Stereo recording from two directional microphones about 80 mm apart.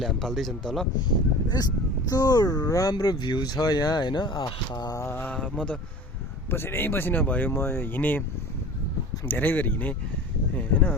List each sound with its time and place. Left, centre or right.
0.0 s speech: centre
1.0 s speech: left
2.9 s speech: left
5.1 s speech: left
6.5 s speech: left
9.2 s speech: left